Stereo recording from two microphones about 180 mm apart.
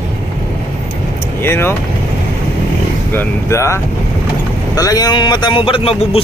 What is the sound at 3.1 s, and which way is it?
Speech, 15° left (ahead or behind).